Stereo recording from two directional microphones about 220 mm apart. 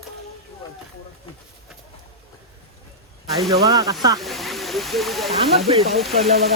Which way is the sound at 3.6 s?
15° right (ahead or behind).